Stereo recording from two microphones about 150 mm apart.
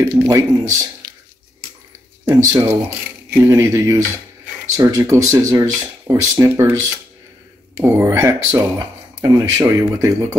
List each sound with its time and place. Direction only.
0.1 s speech: 20° right (ahead or behind)
2.4 s speech: 20° right (ahead or behind)